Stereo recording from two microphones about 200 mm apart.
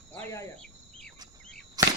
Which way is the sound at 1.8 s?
20° right (ahead or behind).